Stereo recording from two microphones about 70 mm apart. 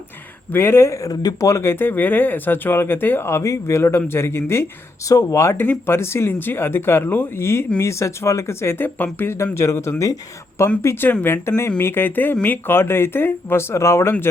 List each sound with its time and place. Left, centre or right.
0.5 s speech: left
1.5 s speech: left
1.7 s speech: left
5.0 s speech: left
5.5 s speech: left